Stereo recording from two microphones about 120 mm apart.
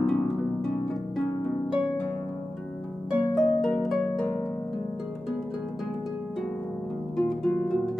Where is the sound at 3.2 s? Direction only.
25° left (ahead or behind).